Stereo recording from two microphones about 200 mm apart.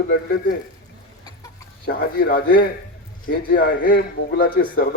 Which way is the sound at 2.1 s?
50° left (ahead or behind).